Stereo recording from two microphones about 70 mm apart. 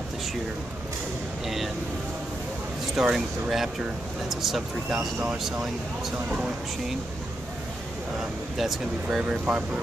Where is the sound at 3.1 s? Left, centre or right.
Centre.